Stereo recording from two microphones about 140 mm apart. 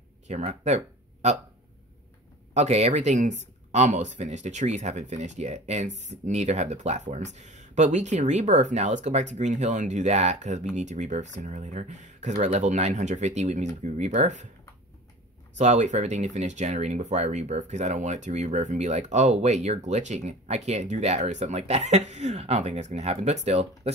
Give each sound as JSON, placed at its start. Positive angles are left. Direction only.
{"t": 0.3, "sound": "speech", "side_deg": -55}
{"t": 2.5, "sound": "speech", "side_deg": -55}
{"t": 15.5, "sound": "speech", "side_deg": -55}